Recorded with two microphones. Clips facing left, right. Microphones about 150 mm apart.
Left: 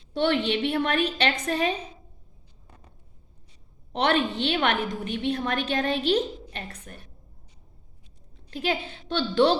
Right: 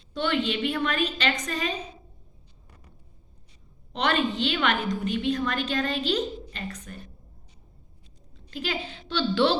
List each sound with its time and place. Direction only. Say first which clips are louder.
0.1 s a woman's voice: left 3 dB; 60° left (ahead or behind)
3.9 s a woman's voice: left 2 dB; 60° left (ahead or behind)
8.7 s a woman's voice: left 1 dB; 50° left (ahead or behind)